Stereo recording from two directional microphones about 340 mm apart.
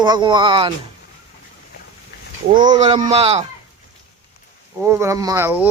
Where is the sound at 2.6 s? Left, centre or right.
Centre.